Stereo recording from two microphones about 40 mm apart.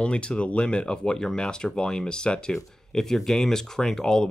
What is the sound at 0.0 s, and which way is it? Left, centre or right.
Speech, left.